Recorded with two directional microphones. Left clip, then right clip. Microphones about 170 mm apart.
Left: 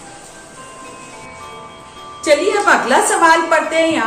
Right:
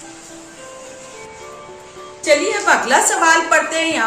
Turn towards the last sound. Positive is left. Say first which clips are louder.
# left 2 dB
turn(degrees=-25)  # may be behind; listen again after turning